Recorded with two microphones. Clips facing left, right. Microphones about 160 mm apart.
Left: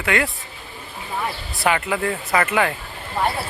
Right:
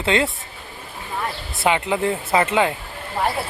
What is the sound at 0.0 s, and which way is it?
Speech, 25° right (ahead or behind).